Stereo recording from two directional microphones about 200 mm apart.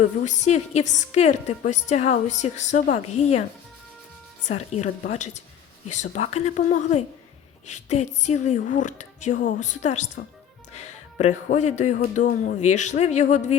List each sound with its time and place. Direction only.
0.0 s a woman's voice: 35° left (ahead or behind)
4.4 s a woman's voice: 35° left (ahead or behind)